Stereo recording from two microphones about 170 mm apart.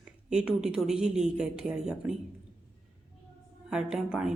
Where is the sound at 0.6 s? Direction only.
5° right (ahead or behind).